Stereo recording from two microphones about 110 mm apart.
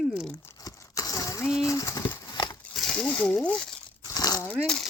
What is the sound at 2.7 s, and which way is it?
Speech, 5° left (ahead or behind).